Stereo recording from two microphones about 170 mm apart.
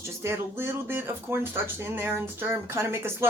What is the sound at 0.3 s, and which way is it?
Speech, 15° right (ahead or behind).